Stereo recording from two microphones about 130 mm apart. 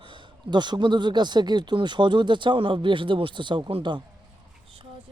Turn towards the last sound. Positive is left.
turn(degrees=-40)  # may be behind; listen again after turning